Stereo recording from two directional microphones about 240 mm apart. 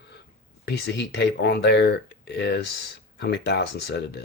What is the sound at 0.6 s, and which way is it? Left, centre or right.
Speech, left.